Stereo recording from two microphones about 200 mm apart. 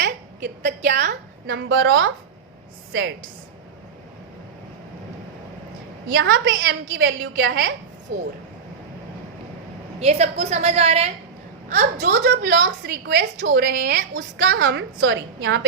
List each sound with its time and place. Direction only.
0.0 s a woman's voice: 60° right (ahead or behind); by 2.1 s 75° right (ahead or behind)
6.1 s a woman's voice: 75° right (ahead or behind)
10.0 s a woman's voice: 30° right (ahead or behind)
12.1 s a woman's voice: 60° right (ahead or behind)